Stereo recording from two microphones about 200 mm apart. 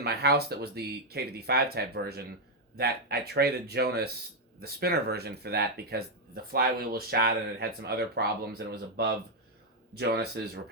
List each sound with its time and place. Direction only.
0.0 s speech: 55° right (ahead or behind)